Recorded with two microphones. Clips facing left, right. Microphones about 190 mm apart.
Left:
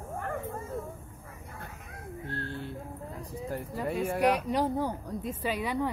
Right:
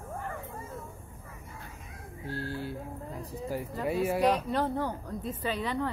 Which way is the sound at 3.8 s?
5° right (ahead or behind).